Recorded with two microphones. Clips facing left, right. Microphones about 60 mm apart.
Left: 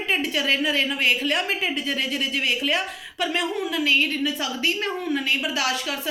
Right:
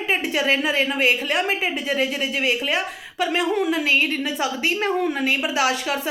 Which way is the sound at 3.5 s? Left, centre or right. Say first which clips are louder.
Right 6 dB; right.